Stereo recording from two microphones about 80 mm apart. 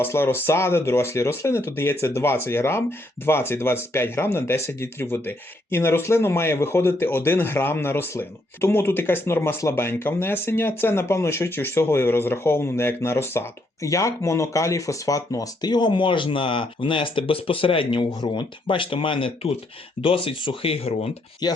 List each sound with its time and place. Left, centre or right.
0.0 s speech: left
21.4 s speech: left